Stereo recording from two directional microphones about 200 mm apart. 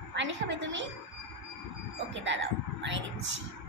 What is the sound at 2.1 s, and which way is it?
Speech, 65° right (ahead or behind).